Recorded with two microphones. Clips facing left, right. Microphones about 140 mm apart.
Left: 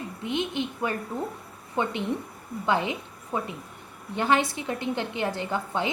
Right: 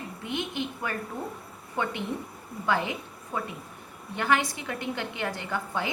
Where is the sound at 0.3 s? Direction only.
20° left (ahead or behind).